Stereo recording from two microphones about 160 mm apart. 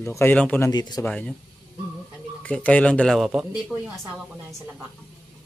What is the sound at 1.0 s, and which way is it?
Speech, 5° left (ahead or behind).